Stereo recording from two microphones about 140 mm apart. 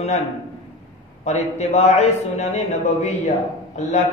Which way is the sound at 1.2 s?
55° left (ahead or behind).